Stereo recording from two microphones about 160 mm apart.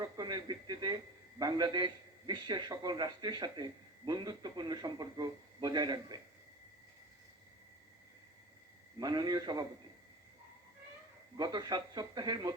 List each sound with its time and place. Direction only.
0.0 s radio: 25° right (ahead or behind)
1.4 s a man's voice: 25° right (ahead or behind)
9.0 s a man's voice: 25° right (ahead or behind)
11.3 s a man's voice: 25° right (ahead or behind)